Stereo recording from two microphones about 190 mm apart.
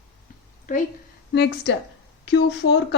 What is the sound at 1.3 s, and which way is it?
A woman's voice, 65° left (ahead or behind).